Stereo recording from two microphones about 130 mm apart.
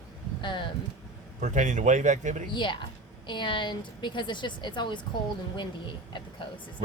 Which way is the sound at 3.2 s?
40° left (ahead or behind).